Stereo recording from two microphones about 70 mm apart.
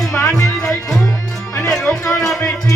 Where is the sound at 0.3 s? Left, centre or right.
Left.